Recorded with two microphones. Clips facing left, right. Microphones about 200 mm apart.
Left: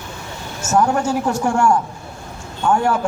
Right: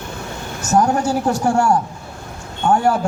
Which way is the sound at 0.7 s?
35° right (ahead or behind).